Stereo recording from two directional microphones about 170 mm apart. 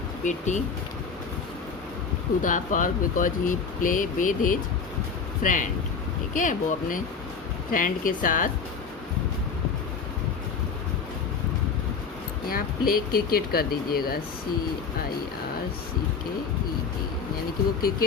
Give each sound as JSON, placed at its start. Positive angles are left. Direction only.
{"t": 0.3, "sound": "speech", "side_deg": 45}
{"t": 2.4, "sound": "speech", "side_deg": 50}
{"t": 12.5, "sound": "speech", "side_deg": 60}